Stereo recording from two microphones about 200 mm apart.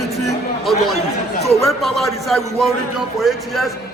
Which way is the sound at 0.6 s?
Centre (ahead or behind).